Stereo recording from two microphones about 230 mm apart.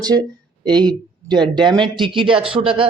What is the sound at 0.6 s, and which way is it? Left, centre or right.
A man's voice, centre.